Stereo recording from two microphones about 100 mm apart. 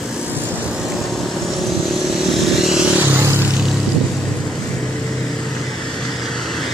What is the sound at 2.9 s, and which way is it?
Vehicle, 20° right (ahead or behind).